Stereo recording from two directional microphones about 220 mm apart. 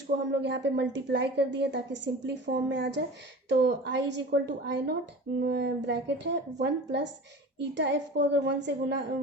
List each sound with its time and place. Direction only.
0.4 s a woman's voice: 50° right (ahead or behind)